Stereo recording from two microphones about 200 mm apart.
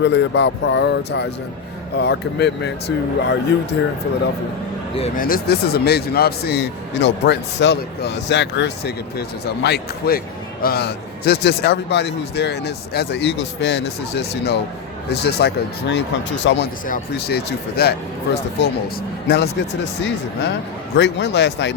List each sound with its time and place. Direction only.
0.0 s a man's voice: 60° left (ahead or behind)
5.1 s a man's voice: 45° left (ahead or behind); by 16.6 s 65° left (ahead or behind)
16.8 s a man's voice: 45° left (ahead or behind)
19.3 s a man's voice: 55° left (ahead or behind)